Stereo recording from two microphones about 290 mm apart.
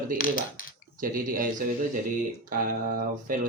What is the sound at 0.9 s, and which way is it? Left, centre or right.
Speech, right.